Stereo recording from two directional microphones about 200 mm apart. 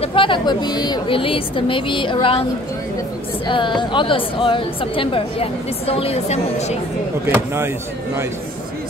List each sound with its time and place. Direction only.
0.0 s a woman's voice: 25° left (ahead or behind)
3.4 s a woman's voice: 25° left (ahead or behind)
7.2 s speech: 10° right (ahead or behind)